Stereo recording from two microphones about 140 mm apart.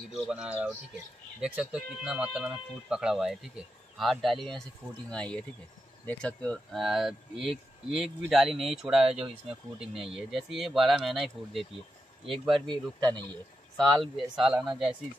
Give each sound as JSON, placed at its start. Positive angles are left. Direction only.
{"t": 0.3, "sound": "speech", "side_deg": -10}
{"t": 12.6, "sound": "speech", "side_deg": -30}
{"t": 13.7, "sound": "speech", "side_deg": 5}